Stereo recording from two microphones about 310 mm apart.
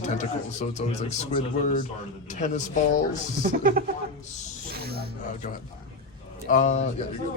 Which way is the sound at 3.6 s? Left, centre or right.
Right.